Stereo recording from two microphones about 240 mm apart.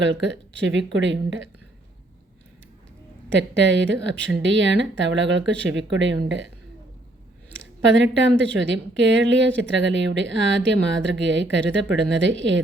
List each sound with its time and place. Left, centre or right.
0.0 s a woman's voice: right
3.3 s a woman's voice: right
7.6 s a woman's voice: right